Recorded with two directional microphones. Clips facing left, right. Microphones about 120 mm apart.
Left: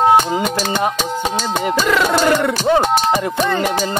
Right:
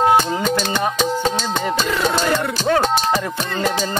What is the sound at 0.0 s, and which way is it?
Speech, 15° left (ahead or behind).